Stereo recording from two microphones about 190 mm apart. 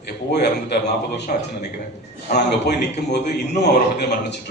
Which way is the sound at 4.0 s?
60° left (ahead or behind).